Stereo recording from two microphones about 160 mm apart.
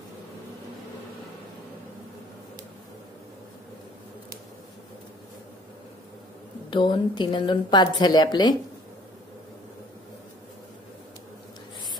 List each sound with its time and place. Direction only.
6.7 s a woman's voice: 30° left (ahead or behind)